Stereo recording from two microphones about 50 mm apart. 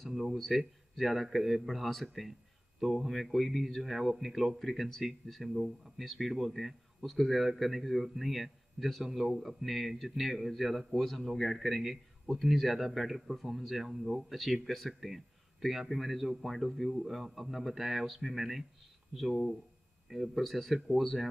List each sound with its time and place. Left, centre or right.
0.1 s a sound: centre
0.4 s speech: centre
20.1 s speech: centre